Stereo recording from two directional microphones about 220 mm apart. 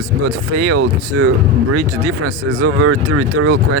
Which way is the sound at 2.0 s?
75° right (ahead or behind).